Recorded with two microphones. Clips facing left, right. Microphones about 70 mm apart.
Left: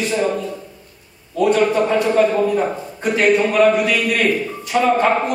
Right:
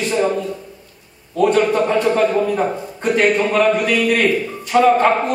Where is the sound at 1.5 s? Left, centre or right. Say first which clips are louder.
Left 1 dB; centre.